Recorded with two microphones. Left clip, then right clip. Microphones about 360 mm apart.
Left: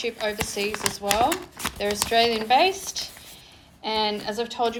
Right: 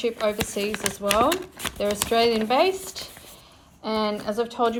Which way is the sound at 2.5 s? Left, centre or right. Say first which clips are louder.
Left 2 dB; centre.